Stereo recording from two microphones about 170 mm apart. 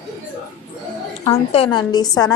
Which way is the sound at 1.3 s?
35° left (ahead or behind).